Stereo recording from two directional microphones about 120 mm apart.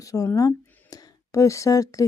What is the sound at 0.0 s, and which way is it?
Speech, 30° left (ahead or behind).